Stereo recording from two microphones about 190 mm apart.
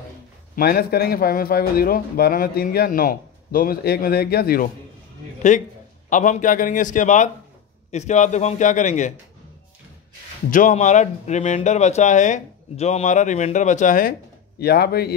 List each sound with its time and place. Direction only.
0.6 s a man's voice: 55° left (ahead or behind)
5.4 s a man's voice: 40° left (ahead or behind)
10.5 s speech: 40° left (ahead or behind)
14.6 s speech: 55° left (ahead or behind)